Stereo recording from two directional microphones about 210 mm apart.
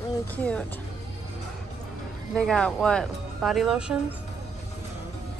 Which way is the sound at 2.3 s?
5° left (ahead or behind).